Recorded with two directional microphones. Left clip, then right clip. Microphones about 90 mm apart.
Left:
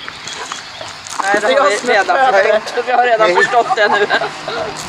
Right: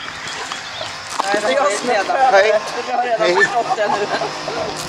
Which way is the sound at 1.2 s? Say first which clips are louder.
Left 5 dB; centre (ahead or behind).